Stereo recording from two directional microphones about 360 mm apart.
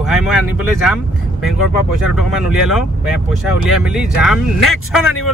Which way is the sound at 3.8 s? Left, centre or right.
Centre.